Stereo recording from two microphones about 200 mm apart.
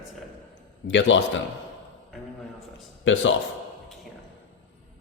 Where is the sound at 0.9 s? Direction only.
65° left (ahead or behind).